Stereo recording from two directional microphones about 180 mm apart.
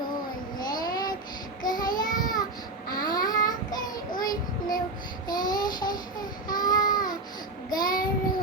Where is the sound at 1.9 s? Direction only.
20° left (ahead or behind).